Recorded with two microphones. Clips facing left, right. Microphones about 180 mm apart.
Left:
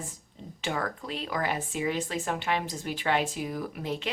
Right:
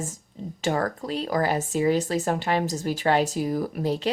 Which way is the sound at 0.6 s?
40° right (ahead or behind).